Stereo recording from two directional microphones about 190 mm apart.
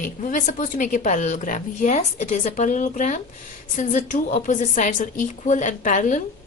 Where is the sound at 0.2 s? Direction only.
45° left (ahead or behind).